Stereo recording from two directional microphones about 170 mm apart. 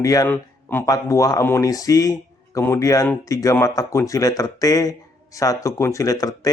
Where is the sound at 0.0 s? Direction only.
20° left (ahead or behind).